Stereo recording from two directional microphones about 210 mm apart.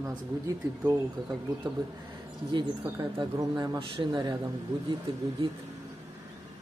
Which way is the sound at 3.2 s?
20° right (ahead or behind).